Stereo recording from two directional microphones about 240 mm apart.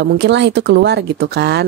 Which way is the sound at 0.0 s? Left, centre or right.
Right.